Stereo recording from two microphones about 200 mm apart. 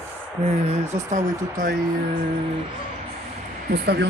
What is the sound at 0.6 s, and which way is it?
Speech, 35° right (ahead or behind).